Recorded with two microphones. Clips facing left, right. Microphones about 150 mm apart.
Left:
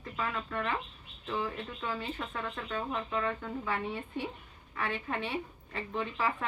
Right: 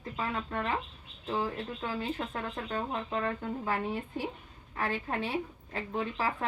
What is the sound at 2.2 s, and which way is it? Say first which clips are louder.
A woman's voice: right 2 dB; 30° right (ahead or behind).